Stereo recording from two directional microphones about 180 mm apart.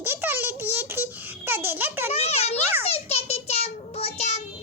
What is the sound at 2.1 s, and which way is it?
Speech, 35° left (ahead or behind).